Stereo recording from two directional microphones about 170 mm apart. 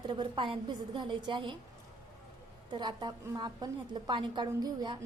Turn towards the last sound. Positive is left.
turn(degrees=-25)  # may be behind; listen again after turning